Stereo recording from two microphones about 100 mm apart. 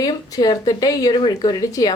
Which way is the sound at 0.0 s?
40° left (ahead or behind).